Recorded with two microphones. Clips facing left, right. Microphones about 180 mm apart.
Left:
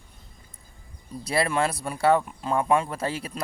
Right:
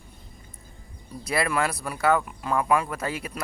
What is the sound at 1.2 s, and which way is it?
Speech, 30° left (ahead or behind).